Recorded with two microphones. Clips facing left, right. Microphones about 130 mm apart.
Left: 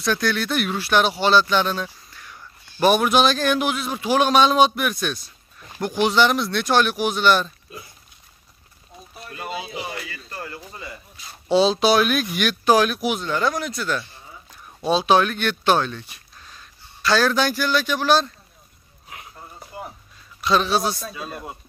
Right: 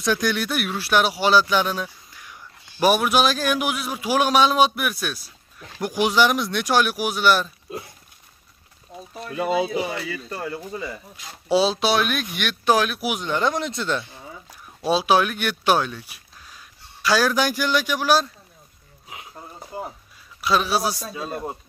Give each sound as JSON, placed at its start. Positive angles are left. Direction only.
{"t": 0.0, "sound": "a man's voice", "side_deg": -15}
{"t": 9.2, "sound": "speech", "side_deg": 0}
{"t": 11.4, "sound": "speech", "side_deg": -5}
{"t": 13.1, "sound": "speech", "side_deg": -15}
{"t": 14.8, "sound": "speech", "side_deg": -5}
{"t": 20.3, "sound": "speech", "side_deg": -5}
{"t": 21.1, "sound": "speech", "side_deg": -30}